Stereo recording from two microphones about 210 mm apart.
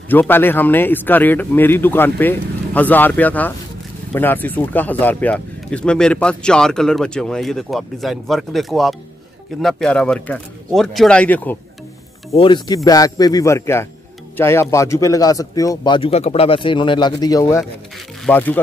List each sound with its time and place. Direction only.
0.1 s speech: 10° left (ahead or behind)
12.4 s speech: 20° left (ahead or behind)